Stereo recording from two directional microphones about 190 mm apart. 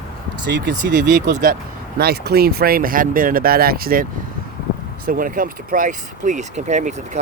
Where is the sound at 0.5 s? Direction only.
70° right (ahead or behind).